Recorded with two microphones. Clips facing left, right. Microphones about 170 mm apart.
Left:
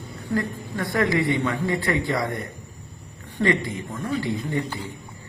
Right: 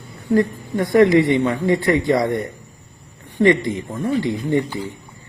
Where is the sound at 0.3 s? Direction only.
20° right (ahead or behind).